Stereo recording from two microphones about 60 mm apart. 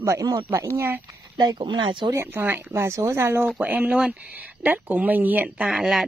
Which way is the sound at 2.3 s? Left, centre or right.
Right.